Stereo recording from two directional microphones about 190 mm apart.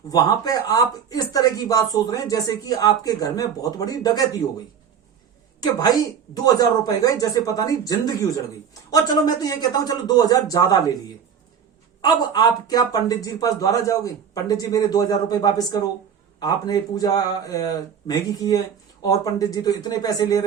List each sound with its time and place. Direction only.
0.1 s speech: 20° left (ahead or behind)
5.5 s speech: 20° left (ahead or behind)
12.0 s speech: 20° left (ahead or behind)